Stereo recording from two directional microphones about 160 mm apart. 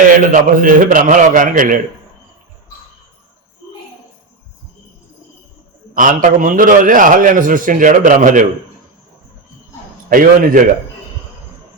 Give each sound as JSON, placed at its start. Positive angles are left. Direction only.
{"t": 0.1, "sound": "a man's voice", "side_deg": -60}
{"t": 5.9, "sound": "a man's voice", "side_deg": -60}
{"t": 10.1, "sound": "a man's voice", "side_deg": -60}